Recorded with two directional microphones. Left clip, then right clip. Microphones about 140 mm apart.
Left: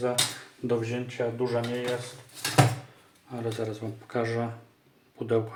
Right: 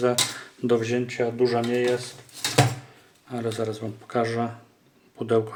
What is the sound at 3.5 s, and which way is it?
Speech, 35° right (ahead or behind).